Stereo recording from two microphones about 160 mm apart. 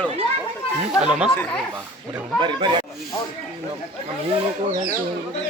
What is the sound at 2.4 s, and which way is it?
Speech, 30° right (ahead or behind).